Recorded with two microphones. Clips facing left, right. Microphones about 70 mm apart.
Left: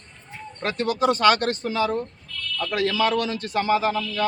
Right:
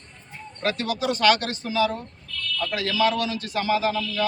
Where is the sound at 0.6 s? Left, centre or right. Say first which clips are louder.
Left 3 dB; left.